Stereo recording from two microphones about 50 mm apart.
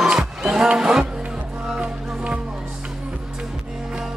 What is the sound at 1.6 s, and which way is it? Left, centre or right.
Music, right.